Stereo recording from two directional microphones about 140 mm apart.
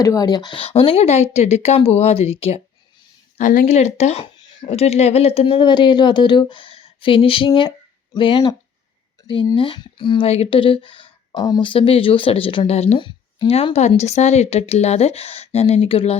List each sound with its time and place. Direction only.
0.0 s a woman's voice: 25° left (ahead or behind); by 2.6 s 45° left (ahead or behind)
3.3 s speech: 70° left (ahead or behind)
3.8 s a woman's voice: 50° left (ahead or behind)
4.4 s a sound: 35° left (ahead or behind)
4.7 s speech: 50° left (ahead or behind)
13.0 s a woman's voice: 35° left (ahead or behind)